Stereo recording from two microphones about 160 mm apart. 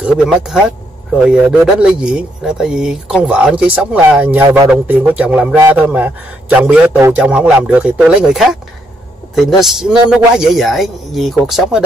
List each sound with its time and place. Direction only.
0.0 s a man's voice: 5° right (ahead or behind)
4.4 s speech: 20° right (ahead or behind)
4.6 s a man's voice: 10° right (ahead or behind)